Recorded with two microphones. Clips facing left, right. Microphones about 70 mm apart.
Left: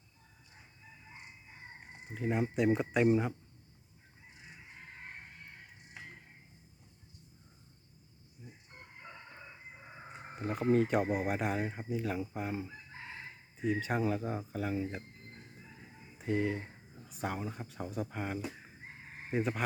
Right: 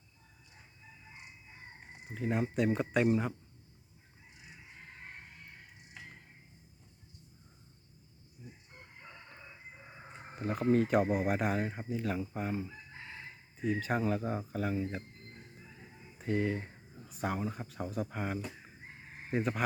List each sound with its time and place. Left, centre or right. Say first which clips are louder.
2.1 s speech: even; centre
8.4 s crowing: right 1 dB; centre
10.1 s speech: right 1 dB; centre
16.1 s speech: even; centre